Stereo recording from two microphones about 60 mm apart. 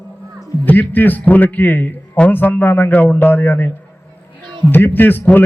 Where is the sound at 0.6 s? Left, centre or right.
Left.